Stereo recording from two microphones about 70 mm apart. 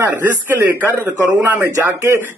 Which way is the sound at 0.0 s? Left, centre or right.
Right.